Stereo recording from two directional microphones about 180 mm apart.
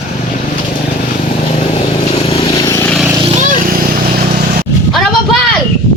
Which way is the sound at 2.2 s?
30° left (ahead or behind).